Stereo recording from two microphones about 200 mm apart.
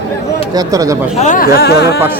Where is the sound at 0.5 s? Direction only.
15° right (ahead or behind).